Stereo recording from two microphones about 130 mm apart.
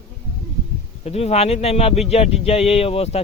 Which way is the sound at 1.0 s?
55° left (ahead or behind).